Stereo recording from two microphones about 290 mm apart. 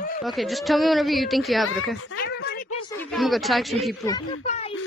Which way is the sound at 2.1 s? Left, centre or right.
Left.